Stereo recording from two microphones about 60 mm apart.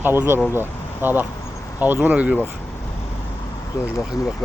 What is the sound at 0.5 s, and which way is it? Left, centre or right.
Speech, right.